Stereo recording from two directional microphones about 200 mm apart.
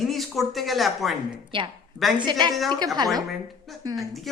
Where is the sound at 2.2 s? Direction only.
20° right (ahead or behind).